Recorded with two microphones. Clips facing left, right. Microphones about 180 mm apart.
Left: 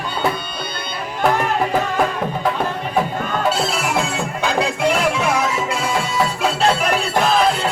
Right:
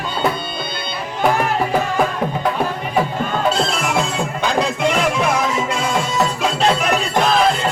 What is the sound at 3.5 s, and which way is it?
Music, 5° left (ahead or behind).